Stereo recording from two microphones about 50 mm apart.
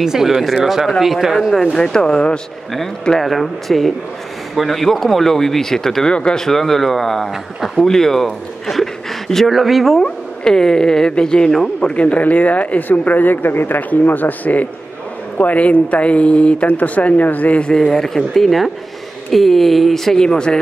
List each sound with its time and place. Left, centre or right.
0.0 s speech: centre
0.8 s speech: centre
2.7 s speech: centre
10.0 s speech: centre; by 17.6 s left
17.6 s speech: centre